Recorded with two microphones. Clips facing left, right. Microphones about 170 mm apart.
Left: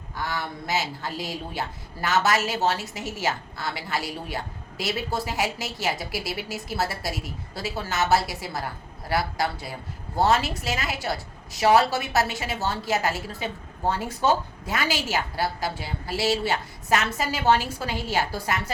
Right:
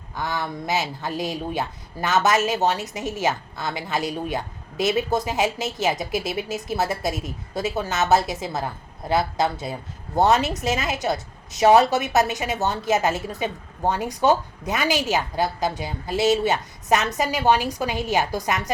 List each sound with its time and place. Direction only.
0.2 s speech: 20° right (ahead or behind)